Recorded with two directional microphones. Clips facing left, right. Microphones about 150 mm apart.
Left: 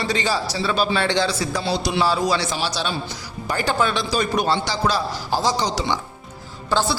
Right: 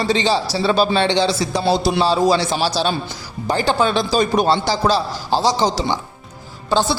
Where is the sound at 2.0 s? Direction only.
25° right (ahead or behind).